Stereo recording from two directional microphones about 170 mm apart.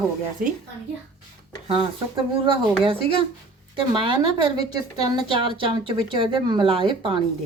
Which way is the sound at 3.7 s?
30° right (ahead or behind).